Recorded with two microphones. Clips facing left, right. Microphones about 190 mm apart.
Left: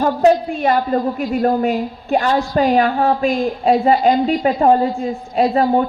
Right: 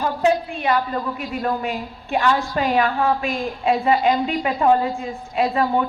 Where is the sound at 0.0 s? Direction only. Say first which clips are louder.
Left 6 dB; 40° left (ahead or behind).